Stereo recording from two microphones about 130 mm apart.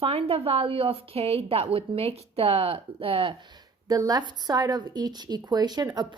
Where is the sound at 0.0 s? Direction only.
45° right (ahead or behind).